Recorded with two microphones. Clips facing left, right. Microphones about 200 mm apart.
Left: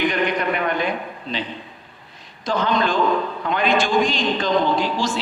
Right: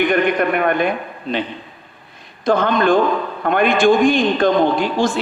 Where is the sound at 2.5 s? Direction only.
55° right (ahead or behind).